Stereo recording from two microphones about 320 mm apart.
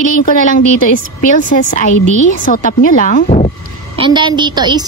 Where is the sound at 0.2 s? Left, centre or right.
Left.